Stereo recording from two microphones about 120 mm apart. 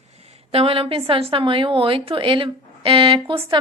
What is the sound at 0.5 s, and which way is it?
A woman's voice, 50° right (ahead or behind).